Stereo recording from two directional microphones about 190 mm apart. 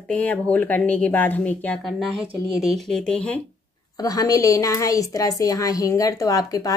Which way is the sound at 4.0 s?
20° left (ahead or behind).